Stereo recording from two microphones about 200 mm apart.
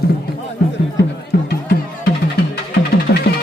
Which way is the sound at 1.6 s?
55° left (ahead or behind).